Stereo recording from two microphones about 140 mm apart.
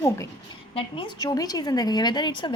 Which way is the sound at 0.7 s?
40° left (ahead or behind).